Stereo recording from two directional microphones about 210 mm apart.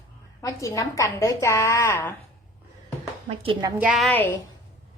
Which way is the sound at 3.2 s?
25° right (ahead or behind).